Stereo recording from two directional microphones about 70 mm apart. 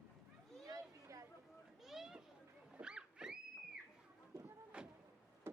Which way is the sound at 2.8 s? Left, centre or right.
Centre.